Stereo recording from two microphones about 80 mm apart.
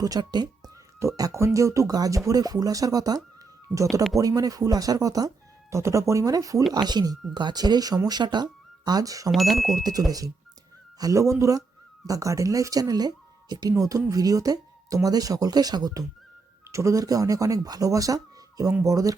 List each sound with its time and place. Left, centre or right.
0.0 s speech: right
0.9 s speech: right
4.2 s speech: right
9.3 s speech: centre
10.1 s speech: right
16.7 s speech: right